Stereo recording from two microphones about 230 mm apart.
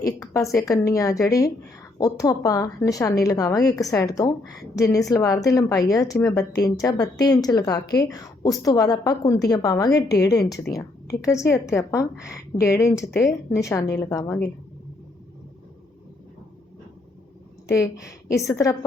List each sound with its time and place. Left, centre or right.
0.2 s a woman's voice: centre
17.7 s a woman's voice: centre